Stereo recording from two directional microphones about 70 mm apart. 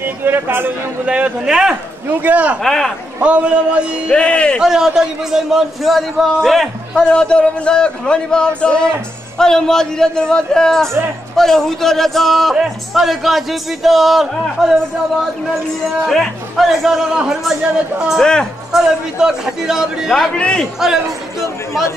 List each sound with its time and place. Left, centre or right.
0.0 s a man's voice: right
1.0 s speech: centre
2.6 s a man's voice: centre
3.2 s speech: centre
4.1 s a man's voice: centre
4.6 s a man's voice: centre
7.2 s a man's voice: centre
16.1 s a man's voice: centre
18.2 s a man's voice: centre
18.7 s speech: centre
20.3 s a man's voice: centre